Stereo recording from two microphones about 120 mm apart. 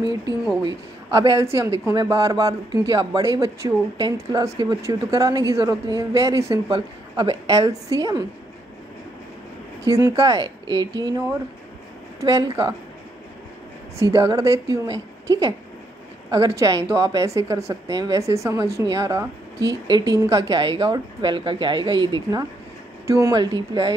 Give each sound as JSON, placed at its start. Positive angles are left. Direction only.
{"t": 0.7, "sound": "a woman's voice", "side_deg": -30}
{"t": 9.8, "sound": "a woman's voice", "side_deg": -30}
{"t": 13.9, "sound": "a woman's voice", "side_deg": -25}
{"t": 23.0, "sound": "speech", "side_deg": -25}
{"t": 23.3, "sound": "a woman's voice", "side_deg": -35}